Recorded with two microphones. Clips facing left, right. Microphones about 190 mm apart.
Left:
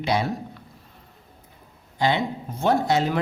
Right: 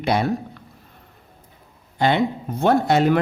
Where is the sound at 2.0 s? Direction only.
55° right (ahead or behind).